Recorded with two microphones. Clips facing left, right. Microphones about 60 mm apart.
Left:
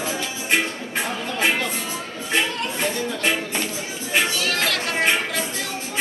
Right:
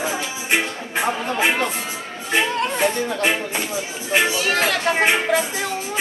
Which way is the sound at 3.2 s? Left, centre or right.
Centre.